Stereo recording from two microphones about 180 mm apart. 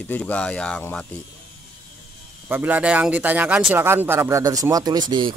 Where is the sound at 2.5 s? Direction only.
10° right (ahead or behind).